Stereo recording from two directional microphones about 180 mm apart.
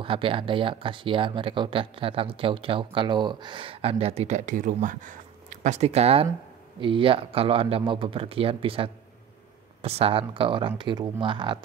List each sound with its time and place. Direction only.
0.0 s speech: 30° right (ahead or behind)